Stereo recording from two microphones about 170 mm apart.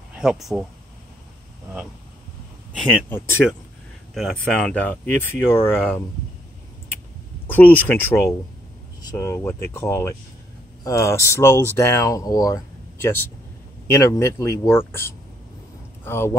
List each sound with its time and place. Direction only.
0.2 s speech: centre (ahead or behind)
4.1 s speech: centre (ahead or behind)
7.4 s speech: 10° left (ahead or behind)